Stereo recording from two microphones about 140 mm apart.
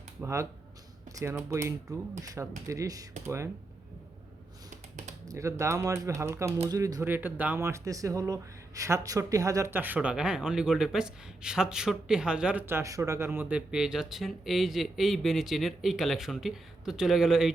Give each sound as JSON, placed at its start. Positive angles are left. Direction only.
{"t": 0.2, "sound": "speech", "side_deg": -20}
{"t": 5.3, "sound": "speech", "side_deg": -20}
{"t": 12.6, "sound": "speech", "side_deg": -20}